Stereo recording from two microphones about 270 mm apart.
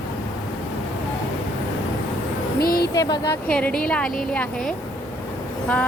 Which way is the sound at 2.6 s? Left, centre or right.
Left.